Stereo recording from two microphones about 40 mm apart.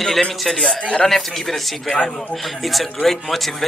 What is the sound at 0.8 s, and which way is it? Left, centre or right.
Speech, left.